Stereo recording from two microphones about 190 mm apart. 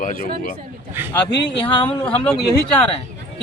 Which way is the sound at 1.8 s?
5° left (ahead or behind).